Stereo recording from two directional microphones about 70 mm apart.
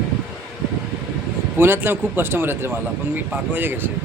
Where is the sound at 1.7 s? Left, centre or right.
Right.